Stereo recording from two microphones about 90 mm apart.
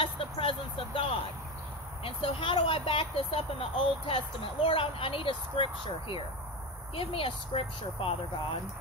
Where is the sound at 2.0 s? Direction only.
80° left.